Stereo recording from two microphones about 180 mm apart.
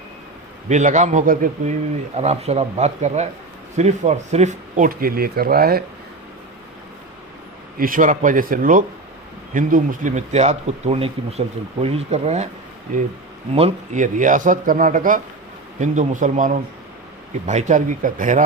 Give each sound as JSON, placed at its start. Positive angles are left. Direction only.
{"t": 0.7, "sound": "speech", "side_deg": -40}
{"t": 2.1, "sound": "speech", "side_deg": -35}
{"t": 7.8, "sound": "speech", "side_deg": -50}
{"t": 13.5, "sound": "speech", "side_deg": -35}